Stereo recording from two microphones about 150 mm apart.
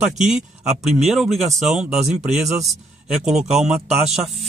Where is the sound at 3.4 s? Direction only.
5° right (ahead or behind).